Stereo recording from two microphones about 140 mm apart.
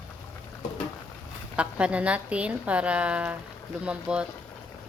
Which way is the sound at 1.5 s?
10° right (ahead or behind).